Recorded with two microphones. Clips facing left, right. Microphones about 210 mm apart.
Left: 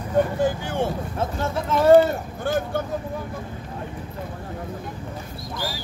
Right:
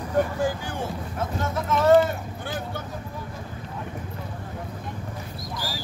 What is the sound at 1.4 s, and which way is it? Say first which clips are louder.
Speech: left 2 dB; 30° left (ahead or behind).